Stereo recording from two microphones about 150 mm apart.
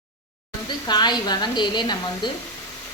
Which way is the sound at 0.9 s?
30° left (ahead or behind).